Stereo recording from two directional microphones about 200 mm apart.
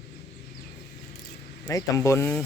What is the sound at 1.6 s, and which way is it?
Speech, 15° left (ahead or behind).